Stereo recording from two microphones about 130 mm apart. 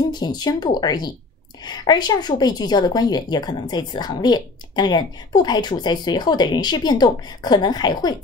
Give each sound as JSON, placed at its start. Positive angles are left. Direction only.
{"t": 0.1, "sound": "a woman's voice", "side_deg": 35}